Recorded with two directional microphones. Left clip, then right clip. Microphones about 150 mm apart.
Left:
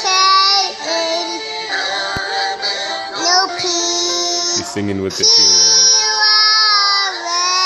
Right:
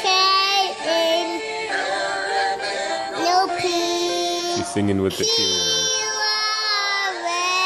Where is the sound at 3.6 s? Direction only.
25° right (ahead or behind).